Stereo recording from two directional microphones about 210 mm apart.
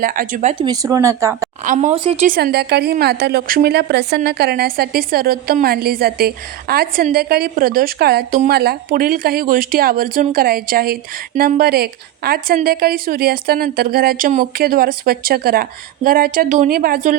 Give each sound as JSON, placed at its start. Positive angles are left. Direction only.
{"t": 0.0, "sound": "speech", "side_deg": -40}
{"t": 0.6, "sound": "speech", "side_deg": -15}
{"t": 1.6, "sound": "speech", "side_deg": -35}
{"t": 2.3, "sound": "a woman's voice", "side_deg": -50}